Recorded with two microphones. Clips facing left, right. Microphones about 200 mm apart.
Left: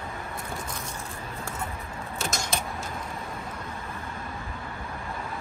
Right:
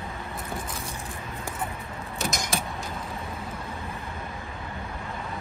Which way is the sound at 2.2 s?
15° right (ahead or behind).